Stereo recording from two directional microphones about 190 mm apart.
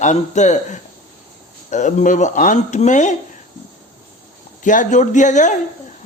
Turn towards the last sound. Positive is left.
turn(degrees=40)  # may be behind; listen again after turning